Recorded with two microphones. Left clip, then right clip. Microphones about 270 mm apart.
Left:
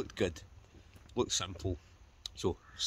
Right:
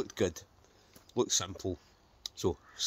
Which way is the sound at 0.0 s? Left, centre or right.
Centre.